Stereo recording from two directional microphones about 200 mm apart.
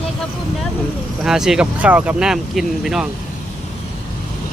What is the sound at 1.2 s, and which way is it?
Speech, centre (ahead or behind).